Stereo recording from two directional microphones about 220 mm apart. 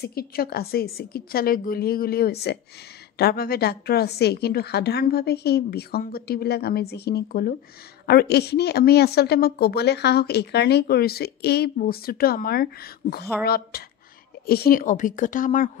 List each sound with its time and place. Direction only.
0.0 s a woman's voice: 45° left (ahead or behind)